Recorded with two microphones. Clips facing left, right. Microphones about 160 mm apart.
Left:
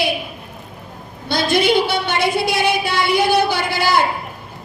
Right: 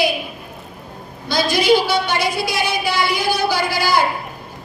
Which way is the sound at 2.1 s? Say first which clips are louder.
Left 2 dB; 60° left (ahead or behind).